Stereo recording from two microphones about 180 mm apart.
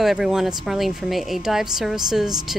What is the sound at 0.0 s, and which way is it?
Speech, centre (ahead or behind).